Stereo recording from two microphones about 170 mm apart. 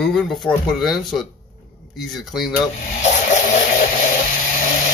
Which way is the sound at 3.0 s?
45° left (ahead or behind).